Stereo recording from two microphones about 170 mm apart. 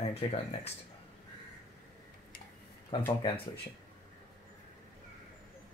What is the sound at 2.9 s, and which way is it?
Speech, 30° left (ahead or behind).